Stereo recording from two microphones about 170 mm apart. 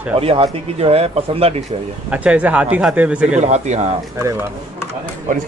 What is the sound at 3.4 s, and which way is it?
Speech, 40° right (ahead or behind).